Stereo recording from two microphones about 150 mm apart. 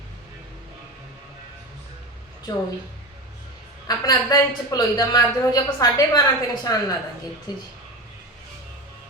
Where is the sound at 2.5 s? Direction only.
25° left (ahead or behind).